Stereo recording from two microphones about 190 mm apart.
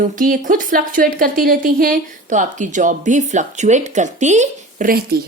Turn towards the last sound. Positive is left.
turn(degrees=-50)  # may be behind; listen again after turning